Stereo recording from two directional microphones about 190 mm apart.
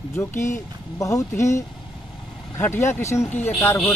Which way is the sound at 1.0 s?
15° left (ahead or behind).